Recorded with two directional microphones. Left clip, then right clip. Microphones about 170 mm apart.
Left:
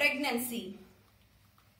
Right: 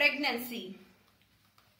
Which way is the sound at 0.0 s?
35° right (ahead or behind).